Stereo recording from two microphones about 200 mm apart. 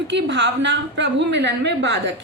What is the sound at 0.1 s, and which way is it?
A woman's voice, 65° right (ahead or behind).